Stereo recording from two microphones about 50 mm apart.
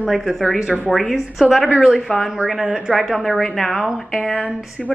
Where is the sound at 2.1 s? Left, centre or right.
Centre.